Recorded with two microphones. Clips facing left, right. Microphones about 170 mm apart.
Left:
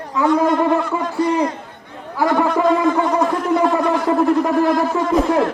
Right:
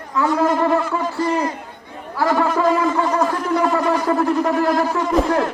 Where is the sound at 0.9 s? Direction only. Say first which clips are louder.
Even; 15° left (ahead or behind).